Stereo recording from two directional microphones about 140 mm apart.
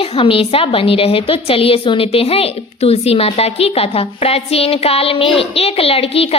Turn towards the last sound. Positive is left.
turn(degrees=45)  # may be behind; listen again after turning